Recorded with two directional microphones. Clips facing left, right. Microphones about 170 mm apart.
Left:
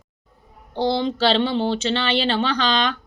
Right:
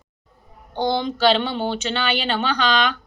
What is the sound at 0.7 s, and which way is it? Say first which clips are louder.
Speech: left 1 dB; 30° left (ahead or behind).